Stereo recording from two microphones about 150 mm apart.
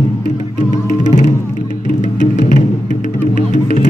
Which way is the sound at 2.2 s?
55° left (ahead or behind).